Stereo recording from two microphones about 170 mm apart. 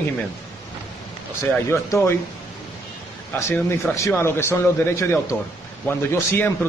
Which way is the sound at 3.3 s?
10° left (ahead or behind).